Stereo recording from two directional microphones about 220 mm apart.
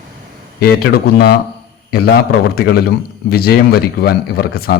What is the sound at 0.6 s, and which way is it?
A man's voice, 45° left (ahead or behind).